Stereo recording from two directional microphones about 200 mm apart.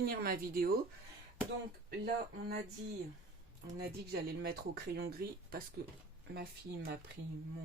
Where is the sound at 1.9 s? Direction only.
50° right (ahead or behind).